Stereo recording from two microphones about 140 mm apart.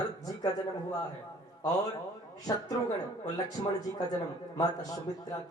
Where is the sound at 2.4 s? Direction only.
25° left (ahead or behind).